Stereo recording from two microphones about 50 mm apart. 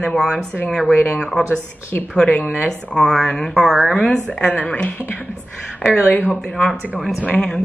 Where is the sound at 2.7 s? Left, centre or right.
Centre.